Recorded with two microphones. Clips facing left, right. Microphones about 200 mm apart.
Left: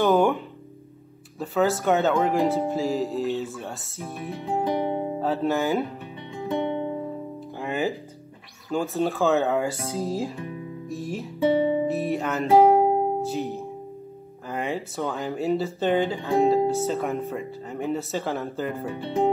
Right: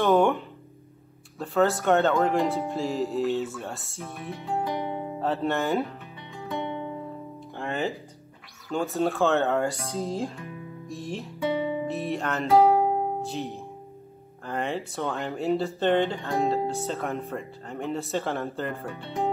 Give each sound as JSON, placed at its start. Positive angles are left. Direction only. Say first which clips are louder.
{"t": 0.0, "sound": "speech", "louder": "left 1 dB", "side_deg": 0}
{"t": 1.4, "sound": "speech", "louder": "left 1 dB", "side_deg": 0}
{"t": 4.4, "sound": "music", "louder": "left 4 dB", "side_deg": 15}
{"t": 4.7, "sound": "music", "louder": "left 5 dB", "side_deg": 50}
{"t": 5.2, "sound": "speech", "louder": "left 1 dB", "side_deg": 0}
{"t": 6.4, "sound": "music", "louder": "left 6 dB", "side_deg": 20}
{"t": 7.5, "sound": "music", "louder": "left 2 dB", "side_deg": 5}
{"t": 8.6, "sound": "speech", "louder": "left 1 dB", "side_deg": 0}
{"t": 10.9, "sound": "music", "louder": "left 2 dB", "side_deg": 5}
{"t": 12.5, "sound": "music", "louder": "left 3 dB", "side_deg": 15}
{"t": 13.2, "sound": "music", "louder": "left 5 dB", "side_deg": 0}
{"t": 14.5, "sound": "speech", "louder": "left 1 dB", "side_deg": 0}
{"t": 19.0, "sound": "speech", "louder": "left 6 dB", "side_deg": 20}